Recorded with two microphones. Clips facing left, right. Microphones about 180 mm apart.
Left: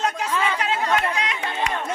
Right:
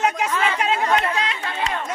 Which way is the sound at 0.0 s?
10° right (ahead or behind).